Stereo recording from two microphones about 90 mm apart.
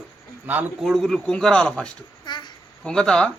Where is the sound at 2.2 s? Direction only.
55° left (ahead or behind).